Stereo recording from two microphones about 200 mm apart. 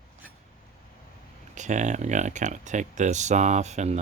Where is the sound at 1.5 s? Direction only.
35° right (ahead or behind).